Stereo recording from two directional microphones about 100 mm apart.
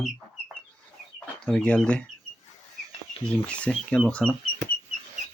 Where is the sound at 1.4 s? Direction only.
10° left (ahead or behind).